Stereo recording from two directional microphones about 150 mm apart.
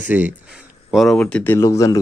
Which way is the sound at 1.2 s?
10° left (ahead or behind).